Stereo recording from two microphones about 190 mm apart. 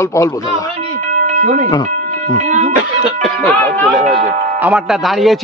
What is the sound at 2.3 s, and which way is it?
Speech, 40° right (ahead or behind).